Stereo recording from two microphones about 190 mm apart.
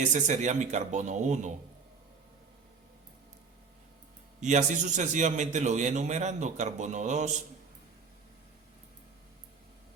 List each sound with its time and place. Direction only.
0.1 s a man's voice: 40° right (ahead or behind)
4.4 s a man's voice: 40° right (ahead or behind)